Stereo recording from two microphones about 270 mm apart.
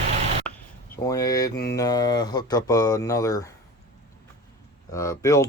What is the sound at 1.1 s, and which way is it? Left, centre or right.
Speech, centre.